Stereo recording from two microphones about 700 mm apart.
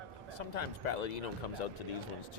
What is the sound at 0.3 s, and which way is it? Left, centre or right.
Speech, left.